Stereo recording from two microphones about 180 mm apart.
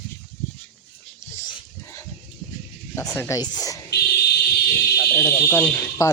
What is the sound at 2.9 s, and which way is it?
Speech, 15° left (ahead or behind).